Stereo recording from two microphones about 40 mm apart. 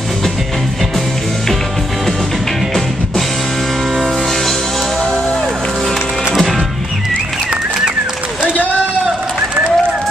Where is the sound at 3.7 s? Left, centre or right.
Centre.